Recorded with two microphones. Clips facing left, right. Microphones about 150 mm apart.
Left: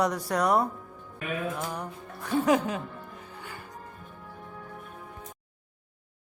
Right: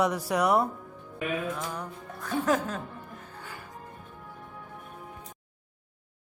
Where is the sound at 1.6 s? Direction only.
5° left (ahead or behind).